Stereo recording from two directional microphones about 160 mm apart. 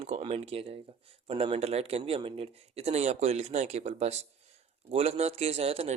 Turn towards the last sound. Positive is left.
turn(degrees=-40)  # may be behind; listen again after turning